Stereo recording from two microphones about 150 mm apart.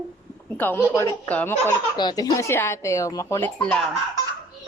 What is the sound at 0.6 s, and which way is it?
Speech, 10° left (ahead or behind).